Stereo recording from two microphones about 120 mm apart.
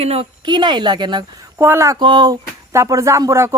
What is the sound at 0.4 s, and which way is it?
Speech, 40° right (ahead or behind).